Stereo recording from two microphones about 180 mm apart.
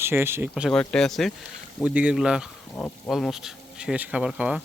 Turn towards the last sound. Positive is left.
turn(degrees=-5)  # may be behind; listen again after turning